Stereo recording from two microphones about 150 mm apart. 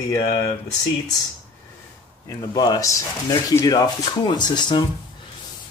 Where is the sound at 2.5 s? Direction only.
25° left (ahead or behind).